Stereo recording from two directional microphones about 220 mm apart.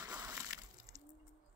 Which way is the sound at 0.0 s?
15° right (ahead or behind).